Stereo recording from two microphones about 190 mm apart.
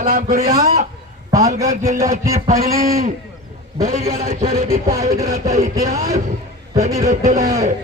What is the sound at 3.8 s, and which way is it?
A man's voice, 40° right (ahead or behind).